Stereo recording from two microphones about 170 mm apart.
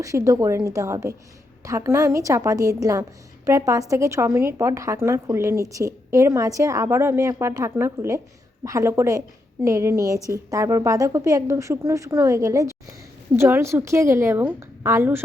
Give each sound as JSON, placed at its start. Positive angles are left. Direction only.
{"t": 0.0, "sound": "a woman's voice", "side_deg": -20}